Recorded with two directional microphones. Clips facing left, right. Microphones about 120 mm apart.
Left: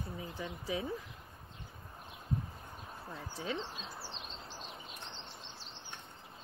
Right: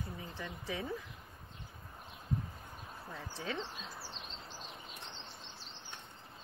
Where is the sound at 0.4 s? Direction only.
25° left (ahead or behind).